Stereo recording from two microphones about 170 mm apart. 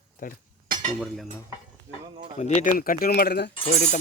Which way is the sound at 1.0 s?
Centre (ahead or behind).